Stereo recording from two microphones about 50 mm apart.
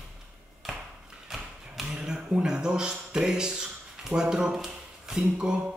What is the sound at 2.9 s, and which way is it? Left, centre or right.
Speech, centre.